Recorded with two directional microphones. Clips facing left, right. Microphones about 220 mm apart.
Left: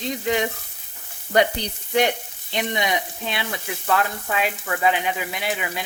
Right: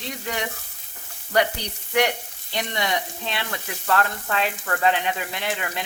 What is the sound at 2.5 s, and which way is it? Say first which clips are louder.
Speech: left 2 dB; 15° left (ahead or behind).